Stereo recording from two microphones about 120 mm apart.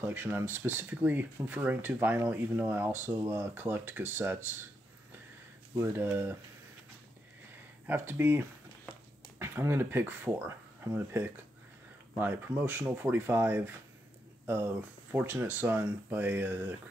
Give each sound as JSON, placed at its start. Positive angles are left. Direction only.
{"t": 0.0, "sound": "speech", "side_deg": -15}
{"t": 5.8, "sound": "speech", "side_deg": -20}
{"t": 7.8, "sound": "speech", "side_deg": -15}
{"t": 14.4, "sound": "a sound", "side_deg": -20}
{"t": 15.1, "sound": "speech", "side_deg": -20}